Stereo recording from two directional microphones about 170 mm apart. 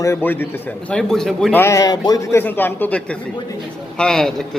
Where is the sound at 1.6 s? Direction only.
20° left (ahead or behind).